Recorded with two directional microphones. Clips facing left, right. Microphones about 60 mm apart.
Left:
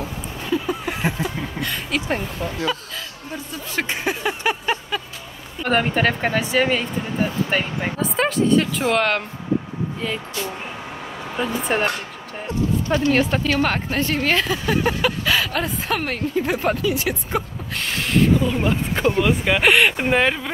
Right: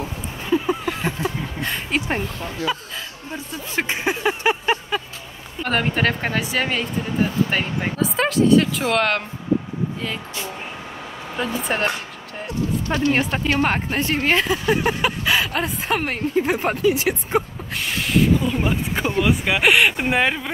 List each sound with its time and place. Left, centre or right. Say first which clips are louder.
0.0 s a sound: even; right
1.2 s speech: right 1 dB; right
5.6 s speech: left 2 dB; centre
11.3 s speech: left 2 dB; centre
13.1 s speech: left 1 dB; right
17.7 s speech: even; centre